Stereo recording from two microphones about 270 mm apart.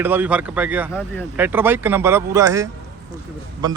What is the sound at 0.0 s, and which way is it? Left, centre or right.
A man's voice, centre.